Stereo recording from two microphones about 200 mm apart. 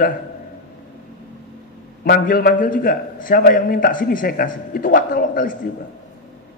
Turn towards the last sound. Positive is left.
turn(degrees=45)  # may be behind; listen again after turning